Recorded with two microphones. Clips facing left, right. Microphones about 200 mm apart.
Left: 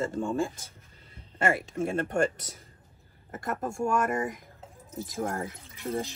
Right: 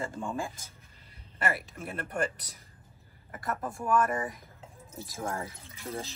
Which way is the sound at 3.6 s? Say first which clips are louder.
Left 5 dB; 45° left (ahead or behind).